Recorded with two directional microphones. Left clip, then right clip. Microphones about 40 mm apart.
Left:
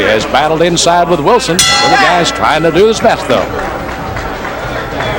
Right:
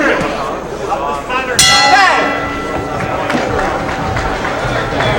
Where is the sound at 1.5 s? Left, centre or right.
Right.